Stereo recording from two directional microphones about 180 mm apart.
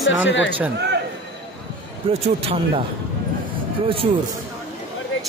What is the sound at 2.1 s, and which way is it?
Speech, 30° right (ahead or behind).